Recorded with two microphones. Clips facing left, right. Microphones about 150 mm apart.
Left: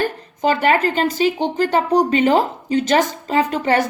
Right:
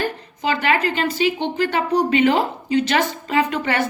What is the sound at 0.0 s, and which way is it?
A woman's voice, 45° left (ahead or behind).